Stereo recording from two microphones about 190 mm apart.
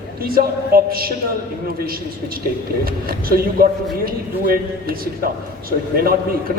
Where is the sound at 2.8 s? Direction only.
50° right (ahead or behind).